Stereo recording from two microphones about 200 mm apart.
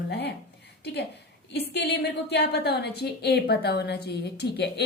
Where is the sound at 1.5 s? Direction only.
55° left (ahead or behind).